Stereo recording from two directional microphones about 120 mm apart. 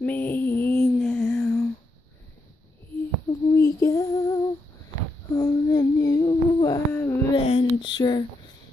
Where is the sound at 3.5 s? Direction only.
25° left (ahead or behind).